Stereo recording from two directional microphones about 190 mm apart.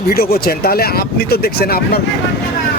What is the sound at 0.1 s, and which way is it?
A man's voice, 55° left (ahead or behind).